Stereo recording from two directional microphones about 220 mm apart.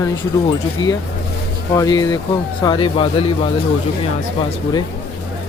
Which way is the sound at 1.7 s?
15° left (ahead or behind).